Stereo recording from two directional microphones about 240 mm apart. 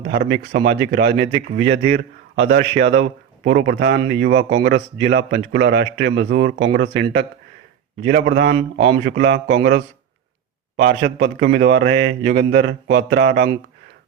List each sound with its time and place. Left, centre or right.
0.5 s a man's voice: right